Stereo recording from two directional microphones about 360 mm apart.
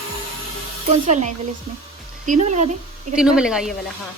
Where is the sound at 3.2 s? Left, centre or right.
Centre.